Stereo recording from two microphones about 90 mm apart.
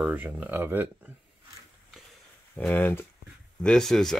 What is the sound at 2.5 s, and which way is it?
Speech, 20° left (ahead or behind).